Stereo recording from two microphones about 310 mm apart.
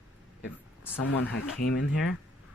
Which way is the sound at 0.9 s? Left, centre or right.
Left.